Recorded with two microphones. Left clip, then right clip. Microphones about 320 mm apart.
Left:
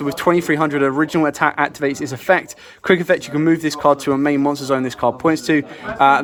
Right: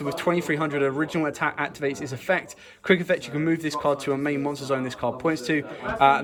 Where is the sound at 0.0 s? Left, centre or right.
Centre.